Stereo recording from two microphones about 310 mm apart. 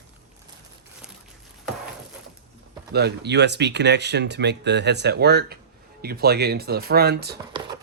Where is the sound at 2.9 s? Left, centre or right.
Right.